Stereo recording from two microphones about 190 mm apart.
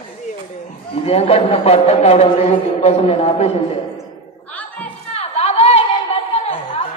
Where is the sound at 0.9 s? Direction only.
30° left (ahead or behind).